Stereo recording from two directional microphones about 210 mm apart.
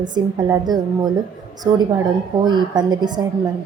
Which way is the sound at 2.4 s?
20° right (ahead or behind).